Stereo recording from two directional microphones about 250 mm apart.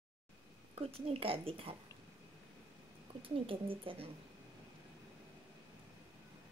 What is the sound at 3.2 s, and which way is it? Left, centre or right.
Speech, right.